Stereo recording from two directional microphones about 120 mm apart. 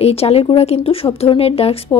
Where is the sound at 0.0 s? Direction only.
55° left (ahead or behind).